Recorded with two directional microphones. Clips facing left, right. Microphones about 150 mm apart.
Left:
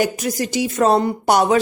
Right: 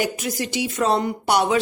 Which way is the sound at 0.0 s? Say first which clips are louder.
Left 4 dB; 40° left (ahead or behind).